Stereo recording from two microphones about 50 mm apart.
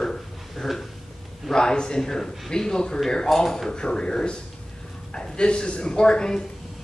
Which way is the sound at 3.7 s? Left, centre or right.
Centre.